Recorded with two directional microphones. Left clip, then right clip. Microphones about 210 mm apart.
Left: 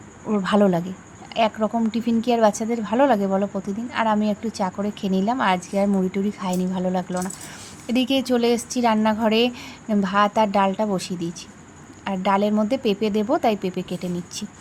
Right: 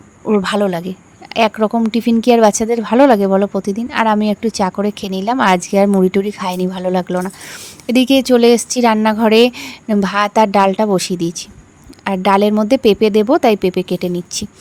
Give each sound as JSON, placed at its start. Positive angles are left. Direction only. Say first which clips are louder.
{"t": 0.3, "sound": "speech", "louder": "right 5 dB", "side_deg": -50}